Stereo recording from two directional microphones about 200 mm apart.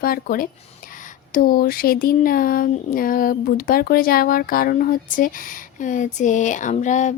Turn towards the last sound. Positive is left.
turn(degrees=40)  # may be behind; listen again after turning